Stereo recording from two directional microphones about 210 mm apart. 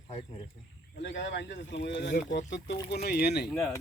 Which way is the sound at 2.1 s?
40° left (ahead or behind).